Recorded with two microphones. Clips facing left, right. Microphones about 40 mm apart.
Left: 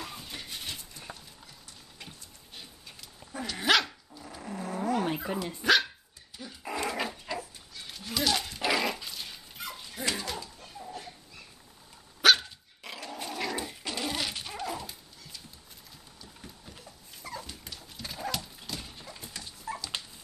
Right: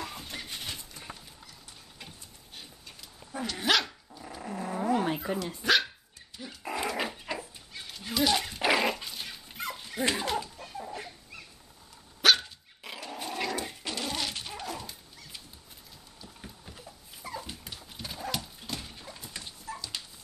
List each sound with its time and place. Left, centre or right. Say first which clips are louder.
0.0 s a sound: right 2 dB; right
3.3 s dog: left 1 dB; centre; by 8.9 s right
9.2 s dog: right 3 dB; right
12.2 s dog: left 1 dB; centre
17.2 s dog: right 1 dB; centre
18.7 s horse: right 1 dB; centre
19.7 s dog: left 3 dB; left